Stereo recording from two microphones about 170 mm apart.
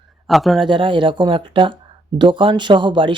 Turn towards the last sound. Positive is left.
turn(degrees=-30)  # may be behind; listen again after turning